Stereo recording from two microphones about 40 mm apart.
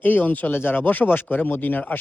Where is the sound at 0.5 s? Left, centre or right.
Left.